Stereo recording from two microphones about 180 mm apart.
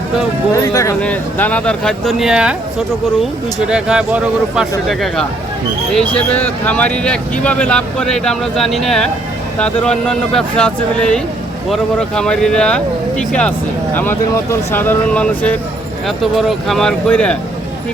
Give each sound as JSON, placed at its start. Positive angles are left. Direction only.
{"t": 0.5, "sound": "speech", "side_deg": 20}
{"t": 1.0, "sound": "speech", "side_deg": 10}
{"t": 3.7, "sound": "speech", "side_deg": -5}